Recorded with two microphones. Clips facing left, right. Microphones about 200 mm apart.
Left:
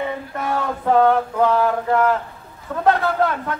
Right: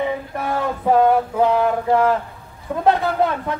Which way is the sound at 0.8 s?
15° right (ahead or behind).